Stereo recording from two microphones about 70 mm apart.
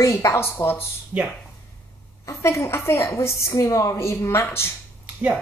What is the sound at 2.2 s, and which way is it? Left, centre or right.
Speech, left.